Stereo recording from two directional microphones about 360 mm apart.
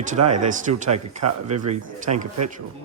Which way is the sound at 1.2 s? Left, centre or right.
Right.